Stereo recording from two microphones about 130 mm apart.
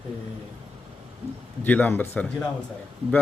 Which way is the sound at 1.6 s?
15° left (ahead or behind).